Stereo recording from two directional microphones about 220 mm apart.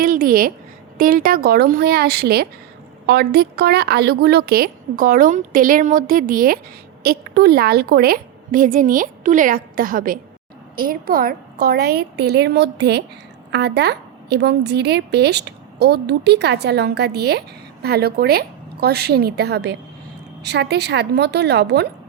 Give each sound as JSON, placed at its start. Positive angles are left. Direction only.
{"t": 0.0, "sound": "a woman's voice", "side_deg": -40}